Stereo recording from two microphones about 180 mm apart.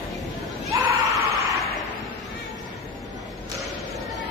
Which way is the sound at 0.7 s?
20° right (ahead or behind).